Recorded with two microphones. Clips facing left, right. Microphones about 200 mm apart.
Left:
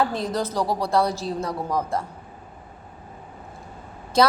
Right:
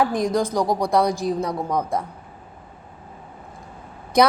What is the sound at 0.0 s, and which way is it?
Speech, 15° right (ahead or behind).